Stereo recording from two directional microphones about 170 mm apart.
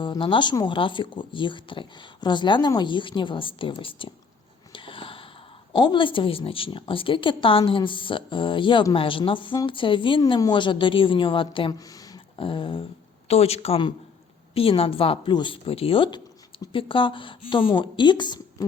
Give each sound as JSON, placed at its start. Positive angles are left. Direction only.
{"t": 0.0, "sound": "a woman's voice", "side_deg": 30}
{"t": 4.7, "sound": "a sound", "side_deg": 30}
{"t": 5.7, "sound": "a woman's voice", "side_deg": 25}